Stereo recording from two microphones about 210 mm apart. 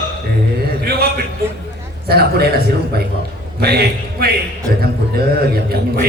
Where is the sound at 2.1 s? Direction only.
50° right (ahead or behind).